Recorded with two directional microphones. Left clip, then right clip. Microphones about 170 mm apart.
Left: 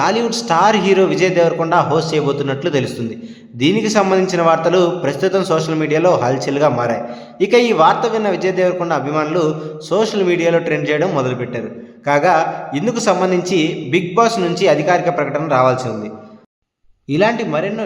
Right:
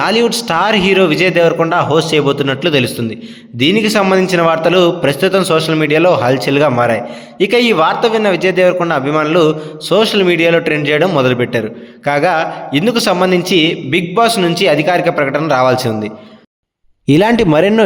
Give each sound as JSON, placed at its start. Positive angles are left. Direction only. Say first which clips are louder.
{"t": 0.0, "sound": "a man's voice", "louder": "right 4 dB", "side_deg": -15}
{"t": 17.1, "sound": "a man's voice", "louder": "right 5 dB", "side_deg": -80}